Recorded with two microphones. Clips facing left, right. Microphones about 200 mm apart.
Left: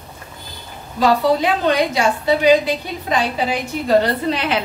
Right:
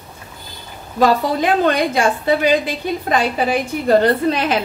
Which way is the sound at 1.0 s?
50° right (ahead or behind).